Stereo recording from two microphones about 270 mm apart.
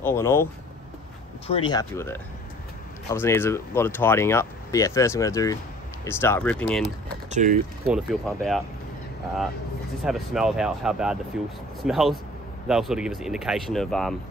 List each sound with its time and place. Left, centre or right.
0.0 s speech: centre
1.5 s speech: centre
7.2 s speech: right
7.8 s speech: centre
10.0 s speech: centre